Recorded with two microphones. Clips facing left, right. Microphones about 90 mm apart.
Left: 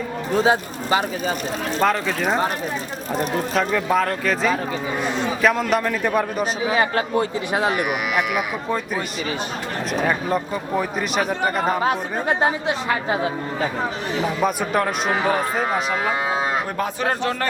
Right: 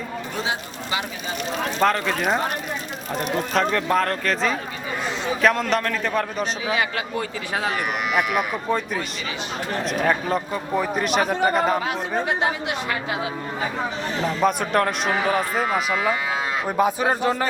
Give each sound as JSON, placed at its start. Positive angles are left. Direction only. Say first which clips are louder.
{"t": 0.4, "sound": "a woman's voice", "louder": "left 8 dB", "side_deg": 40}
{"t": 1.8, "sound": "a man's voice", "louder": "even", "side_deg": 0}
{"t": 6.7, "sound": "a woman's voice", "louder": "left 4 dB", "side_deg": 35}
{"t": 7.7, "sound": "a man's voice", "louder": "left 2 dB", "side_deg": 5}
{"t": 9.9, "sound": "a man's voice", "louder": "left 1 dB", "side_deg": 5}
{"t": 12.4, "sound": "a woman's voice", "louder": "left 3 dB", "side_deg": 35}
{"t": 14.2, "sound": "a man's voice", "louder": "even", "side_deg": 5}
{"t": 15.9, "sound": "a woman's voice", "louder": "left 1 dB", "side_deg": 30}
{"t": 16.7, "sound": "a man's voice", "louder": "right 3 dB", "side_deg": -10}